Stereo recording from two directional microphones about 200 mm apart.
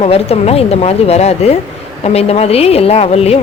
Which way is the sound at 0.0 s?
30° left (ahead or behind).